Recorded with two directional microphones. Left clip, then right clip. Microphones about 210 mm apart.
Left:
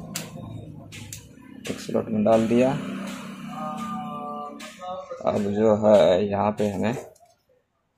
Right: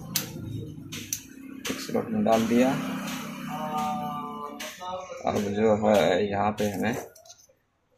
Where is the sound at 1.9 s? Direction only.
40° left (ahead or behind).